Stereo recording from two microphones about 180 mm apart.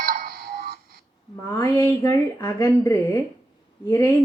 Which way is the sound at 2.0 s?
15° left (ahead or behind).